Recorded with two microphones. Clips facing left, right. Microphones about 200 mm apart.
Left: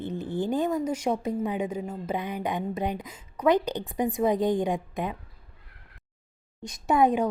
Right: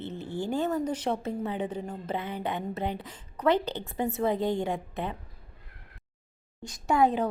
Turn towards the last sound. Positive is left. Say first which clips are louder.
# left 2 dB
turn(degrees=15)  # may be behind; listen again after turning